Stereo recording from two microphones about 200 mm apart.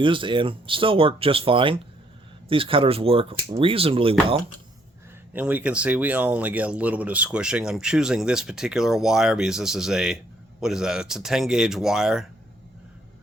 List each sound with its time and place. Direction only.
0.0 s speech: 25° right (ahead or behind)
5.3 s speech: 10° right (ahead or behind)